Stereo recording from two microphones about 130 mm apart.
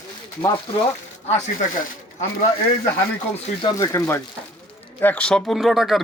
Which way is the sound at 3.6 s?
25° left (ahead or behind).